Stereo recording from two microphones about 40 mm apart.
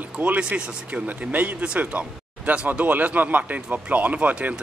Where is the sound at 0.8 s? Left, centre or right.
Right.